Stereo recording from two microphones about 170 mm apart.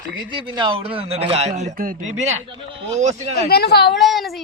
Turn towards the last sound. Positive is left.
turn(degrees=0)  # may be behind; listen again after turning